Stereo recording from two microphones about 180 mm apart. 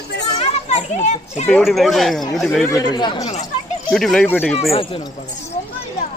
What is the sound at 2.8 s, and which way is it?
Speech, 25° left (ahead or behind).